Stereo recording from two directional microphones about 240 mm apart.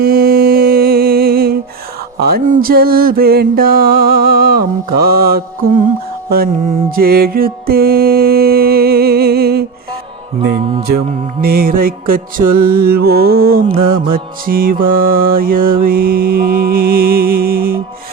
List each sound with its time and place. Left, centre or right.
0.0 s music: right
2.1 s mantra: right
6.9 s music: right
10.8 s mantra: right
13.7 s music: right
14.1 s mantra: right